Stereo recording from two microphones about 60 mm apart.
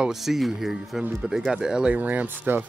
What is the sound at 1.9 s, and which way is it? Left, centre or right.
Speech, right.